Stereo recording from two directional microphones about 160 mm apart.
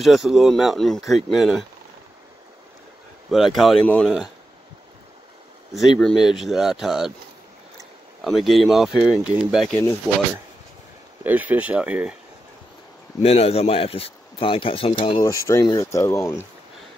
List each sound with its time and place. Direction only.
0.0 s speech: centre (ahead or behind)
3.3 s speech: centre (ahead or behind)
5.9 s speech: centre (ahead or behind)
8.2 s speech: centre (ahead or behind)
11.2 s speech: 10° right (ahead or behind)
13.2 s a man's voice: 40° left (ahead or behind)
15.2 s speech: 20° left (ahead or behind)